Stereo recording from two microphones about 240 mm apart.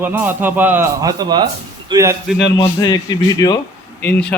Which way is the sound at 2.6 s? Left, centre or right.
Centre.